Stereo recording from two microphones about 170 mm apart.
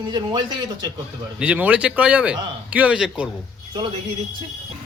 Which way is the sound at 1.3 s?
10° right (ahead or behind).